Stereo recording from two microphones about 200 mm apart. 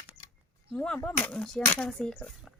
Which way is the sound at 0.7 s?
10° left (ahead or behind).